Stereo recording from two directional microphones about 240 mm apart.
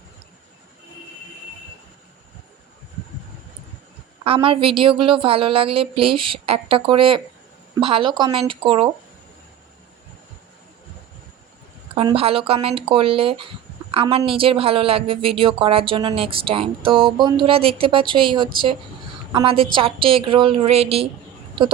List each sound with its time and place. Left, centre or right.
4.2 s speech: right
11.9 s speech: right